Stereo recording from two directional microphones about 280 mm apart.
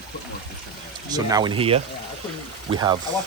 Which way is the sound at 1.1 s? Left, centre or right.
Centre.